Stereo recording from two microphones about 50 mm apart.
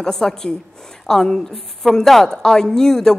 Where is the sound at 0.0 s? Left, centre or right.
Centre.